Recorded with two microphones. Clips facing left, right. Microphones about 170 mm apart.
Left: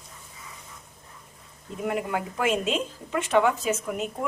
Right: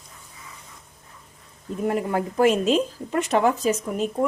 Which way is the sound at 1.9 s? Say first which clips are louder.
Right 4 dB; 40° right (ahead or behind).